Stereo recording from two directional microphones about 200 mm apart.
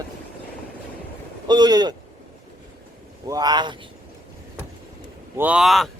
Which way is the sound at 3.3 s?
20° right (ahead or behind).